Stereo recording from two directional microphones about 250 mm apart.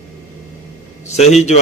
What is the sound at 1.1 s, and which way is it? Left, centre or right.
Speech, left.